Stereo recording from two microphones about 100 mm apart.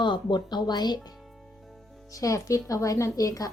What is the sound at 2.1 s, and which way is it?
Speech, 35° left (ahead or behind).